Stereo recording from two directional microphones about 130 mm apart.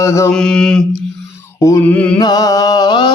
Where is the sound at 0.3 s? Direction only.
5° left (ahead or behind).